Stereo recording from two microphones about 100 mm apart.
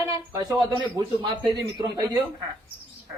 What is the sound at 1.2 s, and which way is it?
Speech, 50° right (ahead or behind).